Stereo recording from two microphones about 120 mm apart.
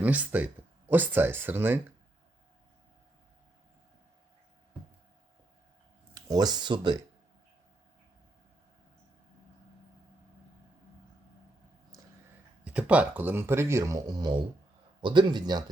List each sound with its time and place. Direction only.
0.0 s speech: 10° right (ahead or behind)
6.1 s speech: 35° right (ahead or behind)
12.6 s speech: 10° right (ahead or behind); by 15.6 s 35° right (ahead or behind)